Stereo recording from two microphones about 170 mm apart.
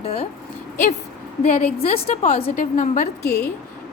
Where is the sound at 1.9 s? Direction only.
40° left (ahead or behind).